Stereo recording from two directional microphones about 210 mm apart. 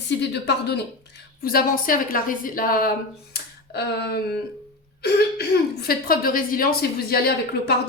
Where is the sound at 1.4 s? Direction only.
45° left (ahead or behind).